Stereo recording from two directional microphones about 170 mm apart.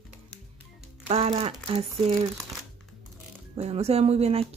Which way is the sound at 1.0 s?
35° right (ahead or behind).